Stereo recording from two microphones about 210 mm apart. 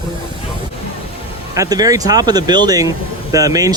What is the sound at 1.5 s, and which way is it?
Speech, 15° right (ahead or behind).